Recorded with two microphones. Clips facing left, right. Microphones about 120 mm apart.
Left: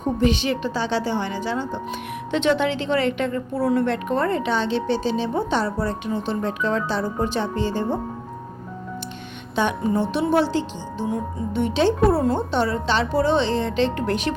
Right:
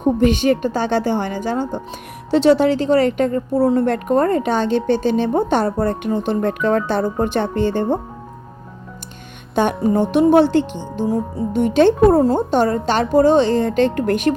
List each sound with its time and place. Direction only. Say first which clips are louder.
0.2 s a woman's voice: right 6 dB; 50° right (ahead or behind)
2.3 s a woman's voice: right 7 dB; 35° right (ahead or behind); by 7.9 s 55° right (ahead or behind)
9.6 s a woman's voice: right 5 dB; 45° right (ahead or behind)
11.1 s a woman's voice: right 6 dB; 40° right (ahead or behind)